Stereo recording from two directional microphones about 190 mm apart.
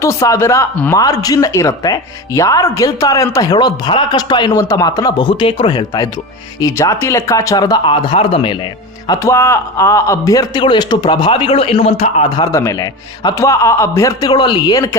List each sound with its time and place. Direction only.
0.0 s a man's voice: 15° left (ahead or behind)
9.0 s a man's voice: 15° left (ahead or behind); by 12.3 s 35° left (ahead or behind)
12.4 s speech: 15° left (ahead or behind)